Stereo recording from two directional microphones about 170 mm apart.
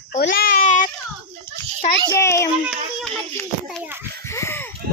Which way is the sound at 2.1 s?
15° left (ahead or behind).